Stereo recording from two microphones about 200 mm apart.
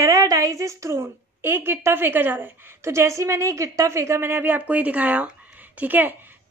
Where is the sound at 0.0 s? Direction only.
15° right (ahead or behind).